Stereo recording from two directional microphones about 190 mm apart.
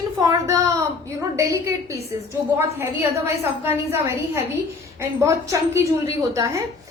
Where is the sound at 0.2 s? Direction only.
20° right (ahead or behind).